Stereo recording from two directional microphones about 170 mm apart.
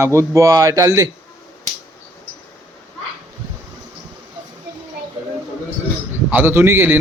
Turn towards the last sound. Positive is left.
turn(degrees=-10)  # may be behind; listen again after turning